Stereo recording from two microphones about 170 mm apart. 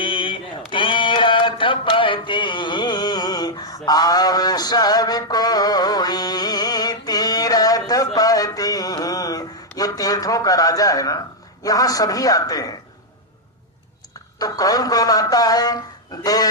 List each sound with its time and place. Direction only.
0.0 s a sound: 30° left (ahead or behind)
11.6 s a man's voice: 20° left (ahead or behind)
14.3 s a man's voice: 20° left (ahead or behind)